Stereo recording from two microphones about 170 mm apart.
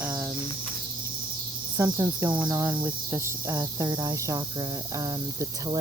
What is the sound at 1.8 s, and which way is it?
Speech, 15° right (ahead or behind).